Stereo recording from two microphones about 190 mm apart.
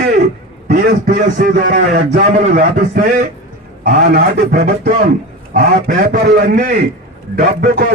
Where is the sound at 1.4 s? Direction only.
50° right (ahead or behind).